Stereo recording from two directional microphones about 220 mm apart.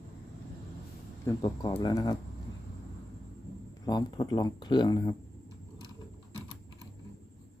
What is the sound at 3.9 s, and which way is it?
Speech, 20° left (ahead or behind).